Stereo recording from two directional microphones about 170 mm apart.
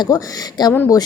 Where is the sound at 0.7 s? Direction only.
10° left (ahead or behind).